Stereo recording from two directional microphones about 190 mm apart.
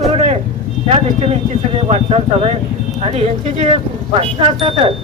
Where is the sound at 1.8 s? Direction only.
30° right (ahead or behind).